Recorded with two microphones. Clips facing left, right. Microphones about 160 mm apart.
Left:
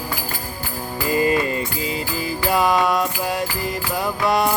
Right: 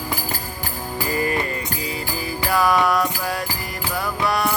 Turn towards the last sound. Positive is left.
turn(degrees=20)  # may be behind; listen again after turning